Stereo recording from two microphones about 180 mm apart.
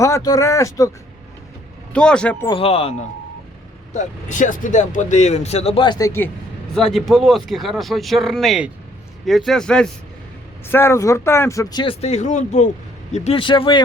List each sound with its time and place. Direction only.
0.0 s speech: 20° left (ahead or behind)
1.9 s speech: 5° left (ahead or behind)
2.5 s speech: 30° left (ahead or behind)
3.9 s speech: 45° left (ahead or behind); by 6.3 s 15° left (ahead or behind)
6.7 s speech: centre (ahead or behind); by 13.8 s 25° left (ahead or behind)